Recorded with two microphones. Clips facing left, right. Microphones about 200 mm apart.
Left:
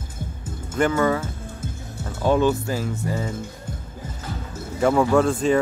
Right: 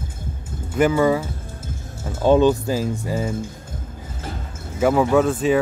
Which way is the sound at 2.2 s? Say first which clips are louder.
Right 4 dB; 20° right (ahead or behind).